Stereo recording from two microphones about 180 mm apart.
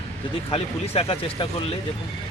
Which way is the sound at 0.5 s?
30° left (ahead or behind).